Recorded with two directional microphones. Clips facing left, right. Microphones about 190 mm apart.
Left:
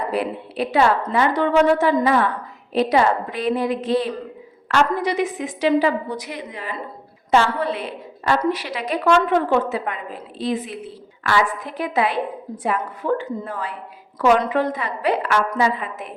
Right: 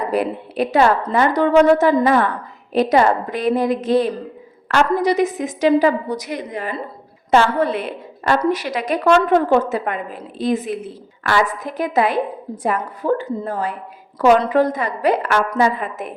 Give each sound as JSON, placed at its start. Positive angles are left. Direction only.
{"t": 0.1, "sound": "a woman's voice", "side_deg": -45}